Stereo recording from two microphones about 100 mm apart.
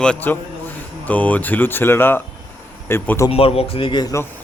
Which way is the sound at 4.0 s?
30° left (ahead or behind).